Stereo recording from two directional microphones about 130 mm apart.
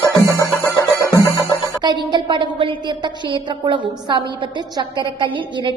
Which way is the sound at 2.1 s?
40° right (ahead or behind).